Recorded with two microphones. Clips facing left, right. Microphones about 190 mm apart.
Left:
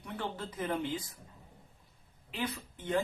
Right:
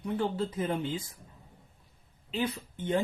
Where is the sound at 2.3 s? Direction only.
25° right (ahead or behind).